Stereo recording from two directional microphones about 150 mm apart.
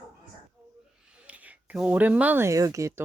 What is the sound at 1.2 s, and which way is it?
Speech, 10° right (ahead or behind).